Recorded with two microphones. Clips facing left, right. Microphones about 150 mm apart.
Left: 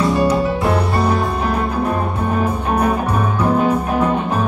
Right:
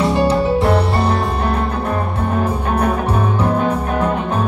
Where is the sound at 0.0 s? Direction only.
25° right (ahead or behind).